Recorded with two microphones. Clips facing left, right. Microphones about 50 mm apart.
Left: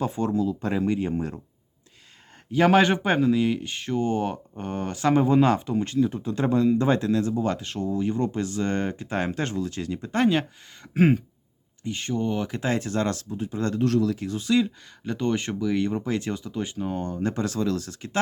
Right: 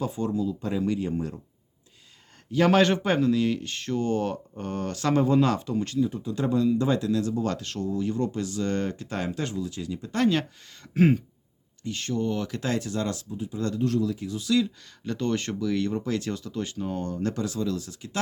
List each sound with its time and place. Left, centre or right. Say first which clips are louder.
0.0 s speech: left 3 dB; left
0.9 s speech: left 2 dB; left
1.1 s speech: left 2 dB; left
2.5 s speech: left 2 dB; centre
6.2 s speech: left 2 dB; left
9.2 s speech: left 1 dB; left
10.0 s speech: left 2 dB; left
12.9 s speech: left 3 dB; left
14.3 s speech: left 1 dB; left
15.0 s speech: left 2 dB; centre
17.4 s speech: left 3 dB; left